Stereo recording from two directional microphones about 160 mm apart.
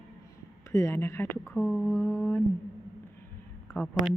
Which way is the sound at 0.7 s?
15° left (ahead or behind).